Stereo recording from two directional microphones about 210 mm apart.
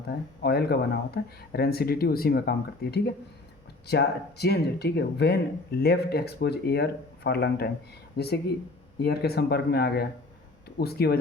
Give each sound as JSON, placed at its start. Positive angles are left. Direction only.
{"t": 0.4, "sound": "speech", "side_deg": 50}